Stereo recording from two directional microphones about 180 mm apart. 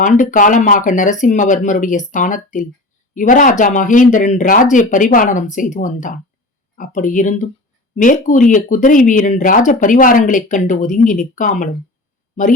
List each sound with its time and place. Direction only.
0.0 s speech: 45° left (ahead or behind)